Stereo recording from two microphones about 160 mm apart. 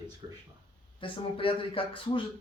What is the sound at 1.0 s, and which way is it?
Speech, 35° left (ahead or behind).